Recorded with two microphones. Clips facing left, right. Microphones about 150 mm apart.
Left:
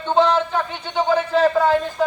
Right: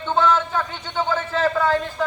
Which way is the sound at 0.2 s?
15° left (ahead or behind).